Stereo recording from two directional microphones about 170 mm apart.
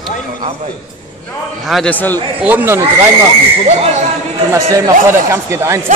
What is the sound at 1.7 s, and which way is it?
Speech, 5° left (ahead or behind).